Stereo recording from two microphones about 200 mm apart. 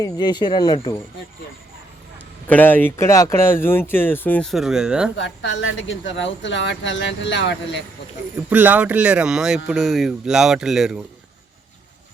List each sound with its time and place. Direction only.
0.0 s speech: 20° left (ahead or behind)
2.5 s speech: 10° left (ahead or behind)
5.1 s speech: 65° left (ahead or behind)
8.4 s speech: 10° right (ahead or behind)